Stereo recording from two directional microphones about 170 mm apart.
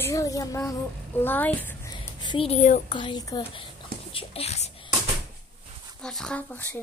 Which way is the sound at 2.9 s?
30° left (ahead or behind).